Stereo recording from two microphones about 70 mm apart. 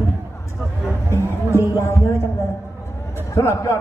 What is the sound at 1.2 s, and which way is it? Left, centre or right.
Music, right.